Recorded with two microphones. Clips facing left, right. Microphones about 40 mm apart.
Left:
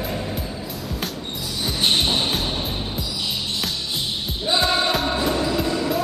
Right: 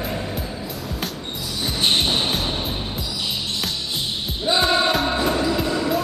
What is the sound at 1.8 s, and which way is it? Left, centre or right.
Music, centre.